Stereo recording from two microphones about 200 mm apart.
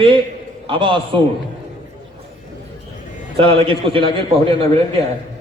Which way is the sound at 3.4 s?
30° right (ahead or behind).